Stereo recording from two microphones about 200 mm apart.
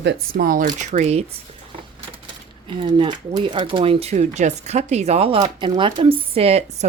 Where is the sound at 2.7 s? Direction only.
25° right (ahead or behind).